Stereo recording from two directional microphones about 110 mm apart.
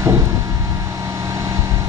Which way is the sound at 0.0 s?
25° right (ahead or behind).